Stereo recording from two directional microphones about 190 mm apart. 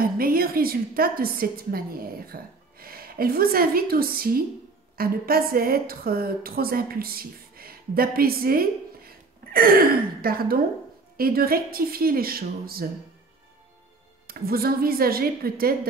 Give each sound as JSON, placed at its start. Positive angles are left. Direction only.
{"t": 0.0, "sound": "a woman's voice", "side_deg": -50}
{"t": 14.2, "sound": "a woman's voice", "side_deg": -50}